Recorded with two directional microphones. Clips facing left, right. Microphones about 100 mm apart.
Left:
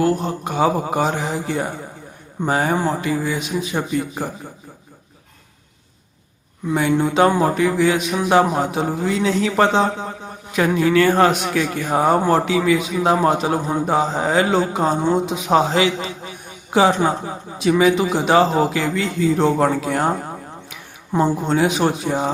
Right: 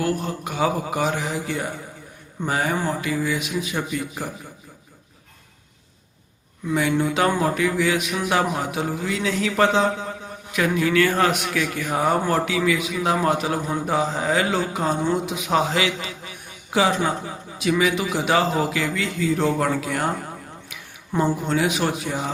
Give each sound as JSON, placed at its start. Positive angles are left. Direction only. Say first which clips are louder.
{"t": 0.0, "sound": "a man's voice", "louder": "left 5 dB", "side_deg": 30}
{"t": 6.7, "sound": "a man's voice", "louder": "left 3 dB", "side_deg": 35}